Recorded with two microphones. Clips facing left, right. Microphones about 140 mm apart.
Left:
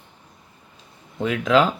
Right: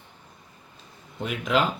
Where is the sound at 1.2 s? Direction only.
90° left.